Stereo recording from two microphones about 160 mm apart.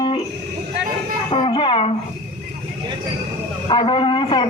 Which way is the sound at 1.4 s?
30° left (ahead or behind).